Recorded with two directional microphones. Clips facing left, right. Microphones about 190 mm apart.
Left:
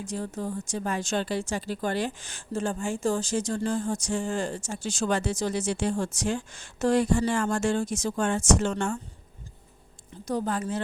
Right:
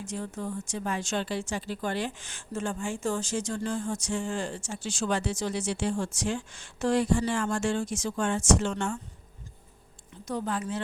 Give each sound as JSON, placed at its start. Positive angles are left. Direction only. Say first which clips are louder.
{"t": 0.0, "sound": "speech", "louder": "left 2 dB", "side_deg": 35}
{"t": 10.2, "sound": "speech", "louder": "left 3 dB", "side_deg": 40}